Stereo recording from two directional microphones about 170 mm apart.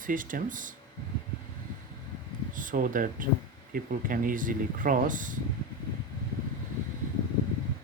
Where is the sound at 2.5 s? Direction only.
50° right (ahead or behind).